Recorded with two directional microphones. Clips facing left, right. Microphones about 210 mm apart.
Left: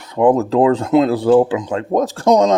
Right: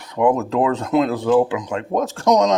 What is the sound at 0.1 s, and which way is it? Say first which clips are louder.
Speech: left 4 dB; 30° left (ahead or behind).